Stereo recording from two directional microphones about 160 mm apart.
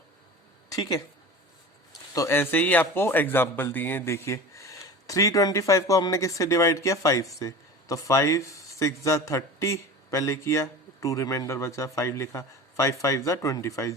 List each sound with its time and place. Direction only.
0.7 s speech: 25° left (ahead or behind)
2.1 s speech: 15° left (ahead or behind)